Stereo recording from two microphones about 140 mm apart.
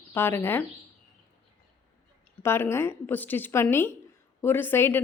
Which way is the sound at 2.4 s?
15° left (ahead or behind).